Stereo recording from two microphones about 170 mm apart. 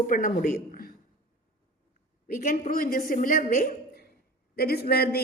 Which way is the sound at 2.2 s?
50° left (ahead or behind).